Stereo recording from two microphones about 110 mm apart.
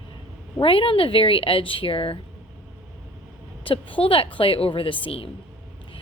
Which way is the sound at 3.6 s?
50° left (ahead or behind).